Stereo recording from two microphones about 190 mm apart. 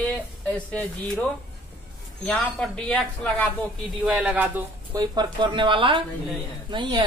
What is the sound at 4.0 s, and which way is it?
Speech, 5° right (ahead or behind).